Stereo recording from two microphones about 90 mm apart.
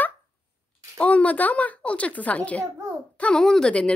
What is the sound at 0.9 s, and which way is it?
A woman's voice, 15° left (ahead or behind).